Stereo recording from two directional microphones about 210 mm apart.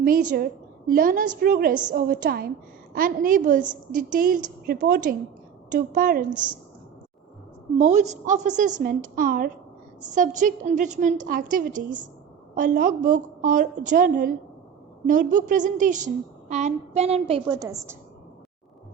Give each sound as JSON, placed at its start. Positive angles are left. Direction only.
{"t": 0.0, "sound": "a woman's voice", "side_deg": -40}
{"t": 7.8, "sound": "a woman's voice", "side_deg": -35}